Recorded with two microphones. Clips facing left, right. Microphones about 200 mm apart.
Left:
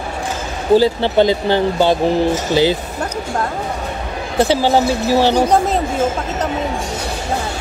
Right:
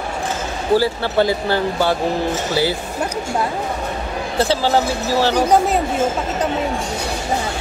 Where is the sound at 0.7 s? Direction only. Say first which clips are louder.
Left 4 dB; 20° left (ahead or behind).